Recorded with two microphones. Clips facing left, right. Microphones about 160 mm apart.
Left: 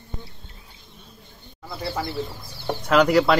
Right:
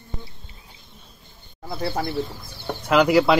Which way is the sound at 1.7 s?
55° right (ahead or behind).